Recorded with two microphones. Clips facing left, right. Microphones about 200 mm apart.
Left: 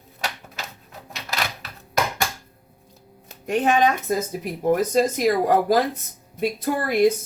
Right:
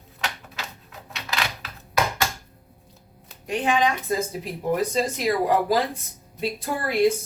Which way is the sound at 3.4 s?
50° left (ahead or behind).